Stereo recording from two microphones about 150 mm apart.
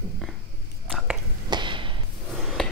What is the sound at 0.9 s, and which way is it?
Biting, centre (ahead or behind).